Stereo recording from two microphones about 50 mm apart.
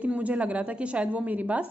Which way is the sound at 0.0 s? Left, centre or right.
Right.